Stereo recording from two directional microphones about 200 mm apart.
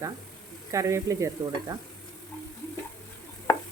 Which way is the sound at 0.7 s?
15° right (ahead or behind).